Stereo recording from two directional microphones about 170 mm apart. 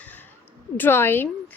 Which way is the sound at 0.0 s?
10° left (ahead or behind).